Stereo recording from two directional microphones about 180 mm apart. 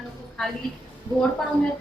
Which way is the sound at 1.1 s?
25° right (ahead or behind).